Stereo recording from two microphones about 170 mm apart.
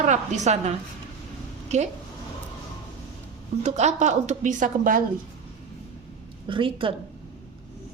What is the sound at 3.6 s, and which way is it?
A woman's voice, 40° right (ahead or behind).